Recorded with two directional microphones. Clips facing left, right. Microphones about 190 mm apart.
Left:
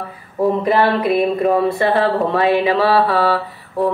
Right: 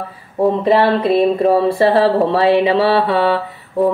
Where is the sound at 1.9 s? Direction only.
30° right (ahead or behind).